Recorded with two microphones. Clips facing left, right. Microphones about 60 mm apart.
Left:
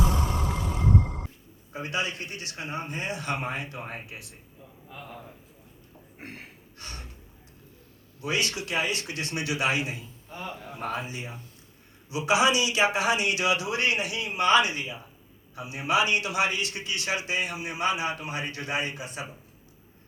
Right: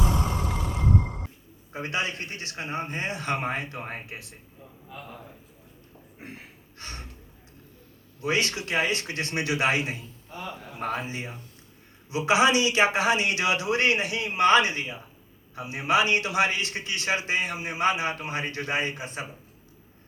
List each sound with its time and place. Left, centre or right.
1.7 s a man's voice: right
6.7 s gasp: right
8.2 s a man's voice: right